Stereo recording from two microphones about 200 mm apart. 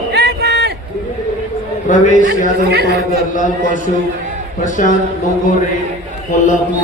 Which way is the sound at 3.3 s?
40° left (ahead or behind).